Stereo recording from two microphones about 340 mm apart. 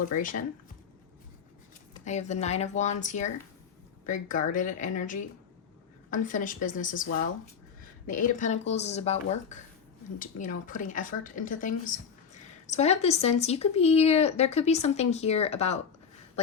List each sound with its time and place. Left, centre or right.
0.0 s speech: left
2.0 s speech: left